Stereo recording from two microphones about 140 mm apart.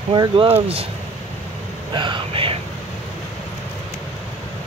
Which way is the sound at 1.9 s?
35° right (ahead or behind).